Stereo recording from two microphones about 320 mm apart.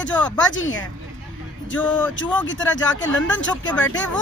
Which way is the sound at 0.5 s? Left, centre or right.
Left.